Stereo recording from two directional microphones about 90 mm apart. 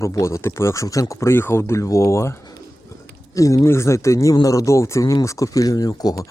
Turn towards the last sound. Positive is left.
turn(degrees=45)  # may be behind; listen again after turning